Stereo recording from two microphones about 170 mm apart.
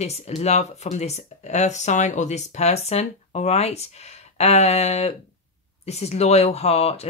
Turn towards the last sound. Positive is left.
turn(degrees=40)  # may be behind; listen again after turning